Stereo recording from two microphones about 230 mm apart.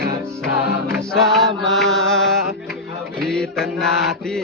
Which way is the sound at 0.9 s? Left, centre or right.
Centre.